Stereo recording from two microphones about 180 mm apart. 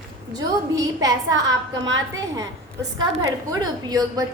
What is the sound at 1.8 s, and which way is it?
Speech, 90° right.